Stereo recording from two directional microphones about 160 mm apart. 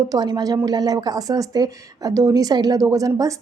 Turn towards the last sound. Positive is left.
turn(degrees=-20)  # may be behind; listen again after turning